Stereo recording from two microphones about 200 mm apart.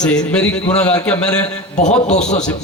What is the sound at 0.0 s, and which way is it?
A man's voice, 5° left (ahead or behind).